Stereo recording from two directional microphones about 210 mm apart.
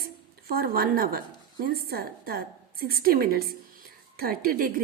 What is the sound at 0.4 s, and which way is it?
A woman's voice, 45° right (ahead or behind).